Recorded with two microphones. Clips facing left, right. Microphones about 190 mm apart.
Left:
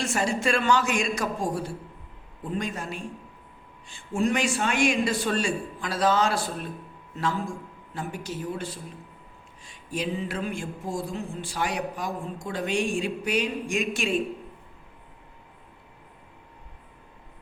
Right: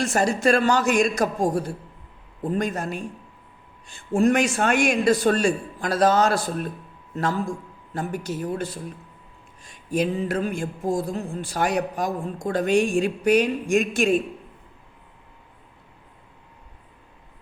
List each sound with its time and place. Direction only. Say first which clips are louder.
0.0 s a man's voice: right 5 dB; 40° right (ahead or behind)
4.1 s a man's voice: right 5 dB; 45° right (ahead or behind)
9.9 s speech: right 6 dB; 45° right (ahead or behind)